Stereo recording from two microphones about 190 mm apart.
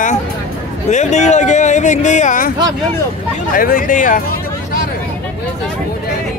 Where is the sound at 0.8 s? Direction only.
40° left (ahead or behind).